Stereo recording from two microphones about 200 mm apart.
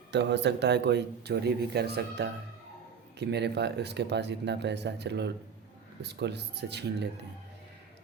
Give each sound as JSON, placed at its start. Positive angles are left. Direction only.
{"t": 0.1, "sound": "speech", "side_deg": -60}